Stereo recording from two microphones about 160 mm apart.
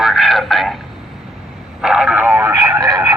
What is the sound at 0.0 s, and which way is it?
Radio, centre (ahead or behind).